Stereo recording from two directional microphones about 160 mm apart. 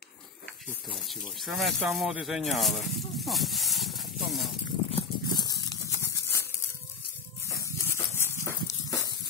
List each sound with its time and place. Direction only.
0.8 s speech: centre (ahead or behind)
4.9 s dog: 25° left (ahead or behind)
7.4 s dog: 20° left (ahead or behind)